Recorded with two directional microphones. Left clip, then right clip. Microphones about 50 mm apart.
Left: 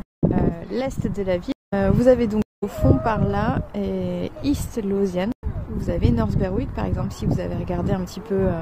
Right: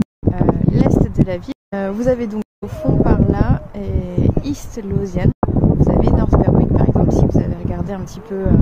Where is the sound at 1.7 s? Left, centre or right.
Left.